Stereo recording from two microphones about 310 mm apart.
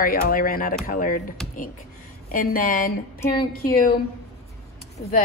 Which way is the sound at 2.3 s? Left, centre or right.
Left.